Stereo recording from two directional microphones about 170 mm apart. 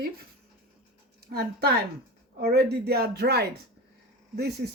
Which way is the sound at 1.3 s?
65° right (ahead or behind).